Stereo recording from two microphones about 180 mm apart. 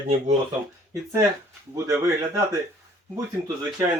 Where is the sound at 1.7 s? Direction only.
15° right (ahead or behind).